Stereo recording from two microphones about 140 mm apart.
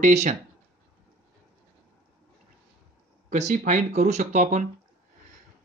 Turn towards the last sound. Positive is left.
turn(degrees=-60)  # may be behind; listen again after turning